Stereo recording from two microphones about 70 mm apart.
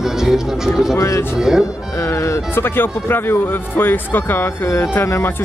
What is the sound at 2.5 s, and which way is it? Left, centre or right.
Speech, left.